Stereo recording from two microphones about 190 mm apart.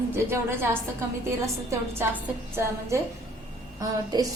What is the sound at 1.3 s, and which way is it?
A woman's voice, 15° right (ahead or behind).